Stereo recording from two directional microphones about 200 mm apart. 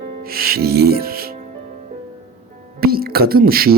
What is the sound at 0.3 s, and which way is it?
Speech, 50° right (ahead or behind).